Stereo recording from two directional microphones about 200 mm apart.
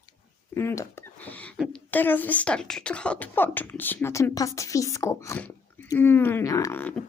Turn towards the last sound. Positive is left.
turn(degrees=10)  # may be behind; listen again after turning